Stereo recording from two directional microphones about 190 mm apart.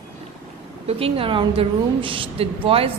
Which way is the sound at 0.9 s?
30° right (ahead or behind).